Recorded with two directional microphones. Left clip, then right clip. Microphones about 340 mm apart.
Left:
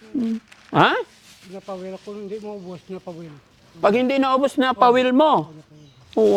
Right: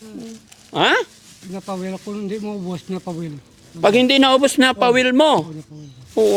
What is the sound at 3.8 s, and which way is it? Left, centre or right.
A man's voice, centre.